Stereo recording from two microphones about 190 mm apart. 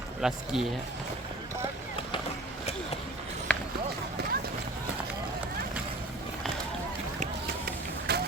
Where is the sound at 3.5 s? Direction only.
10° left (ahead or behind).